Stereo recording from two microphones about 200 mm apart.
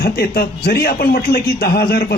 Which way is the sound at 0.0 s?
50° left (ahead or behind).